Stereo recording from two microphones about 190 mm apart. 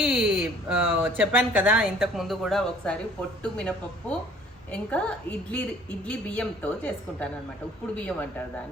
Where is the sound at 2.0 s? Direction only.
Centre (ahead or behind).